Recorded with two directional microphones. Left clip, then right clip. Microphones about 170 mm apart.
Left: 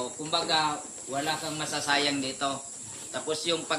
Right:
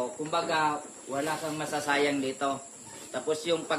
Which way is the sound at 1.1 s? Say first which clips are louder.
Left 1 dB; 25° right (ahead or behind).